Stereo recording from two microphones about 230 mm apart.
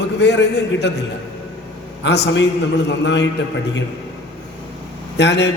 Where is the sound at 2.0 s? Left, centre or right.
Left.